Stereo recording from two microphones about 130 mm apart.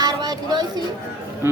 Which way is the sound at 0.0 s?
30° right (ahead or behind).